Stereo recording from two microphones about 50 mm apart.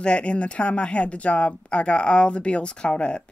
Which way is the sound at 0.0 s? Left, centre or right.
Left.